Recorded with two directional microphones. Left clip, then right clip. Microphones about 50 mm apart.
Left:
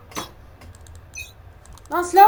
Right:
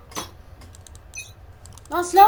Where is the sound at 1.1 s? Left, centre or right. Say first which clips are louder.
Left 2 dB; centre.